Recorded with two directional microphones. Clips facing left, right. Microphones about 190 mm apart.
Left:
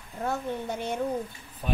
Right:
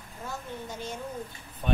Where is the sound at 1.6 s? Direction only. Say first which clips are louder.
Right 1 dB; 5° left (ahead or behind).